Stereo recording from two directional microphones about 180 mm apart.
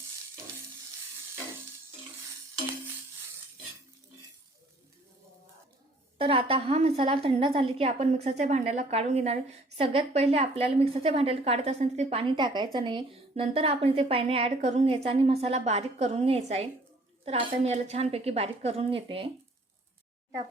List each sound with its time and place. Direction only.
6.1 s a woman's voice: 30° right (ahead or behind)